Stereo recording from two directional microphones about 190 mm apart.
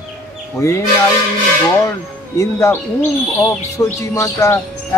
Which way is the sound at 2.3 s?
15° left (ahead or behind).